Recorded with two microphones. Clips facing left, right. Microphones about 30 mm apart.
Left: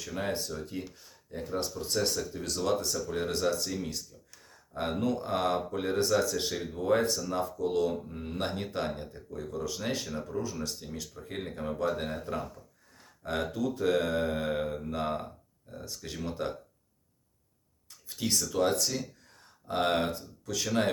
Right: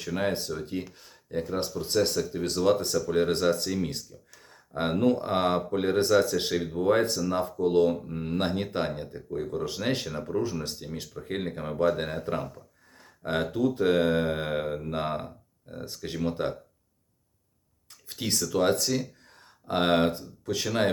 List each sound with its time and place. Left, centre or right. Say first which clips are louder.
0.0 s speech: right 5 dB; right
10.1 s speech: right 5 dB; right
18.1 s speech: right 3 dB; right
18.8 s a sound: right 4 dB; centre
19.6 s speech: right 5 dB; right